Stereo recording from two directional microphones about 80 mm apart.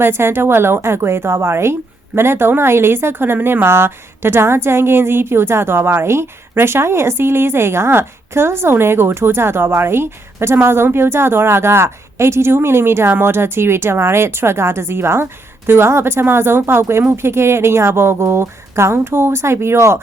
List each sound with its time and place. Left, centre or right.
0.0 s speech: right